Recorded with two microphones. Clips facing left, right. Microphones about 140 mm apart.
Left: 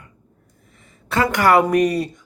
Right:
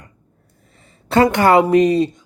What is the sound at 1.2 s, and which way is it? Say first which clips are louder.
Speech: right 1 dB; 25° right (ahead or behind).